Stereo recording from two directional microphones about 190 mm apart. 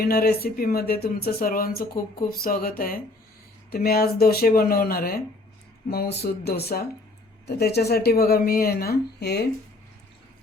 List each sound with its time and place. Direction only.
0.0 s speech: 55° left (ahead or behind)